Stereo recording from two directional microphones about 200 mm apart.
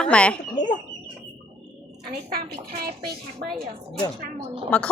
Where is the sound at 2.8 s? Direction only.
50° right (ahead or behind).